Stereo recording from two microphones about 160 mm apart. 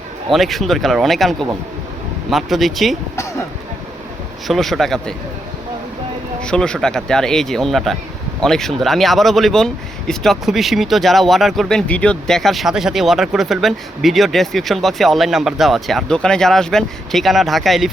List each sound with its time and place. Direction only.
0.3 s speech: centre (ahead or behind)
4.4 s speech: centre (ahead or behind)
6.4 s speech: 5° left (ahead or behind)